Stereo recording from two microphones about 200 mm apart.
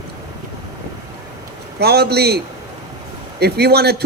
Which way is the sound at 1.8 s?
55° right (ahead or behind).